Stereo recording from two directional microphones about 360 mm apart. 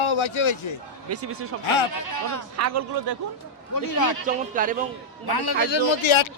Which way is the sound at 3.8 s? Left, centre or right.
Left.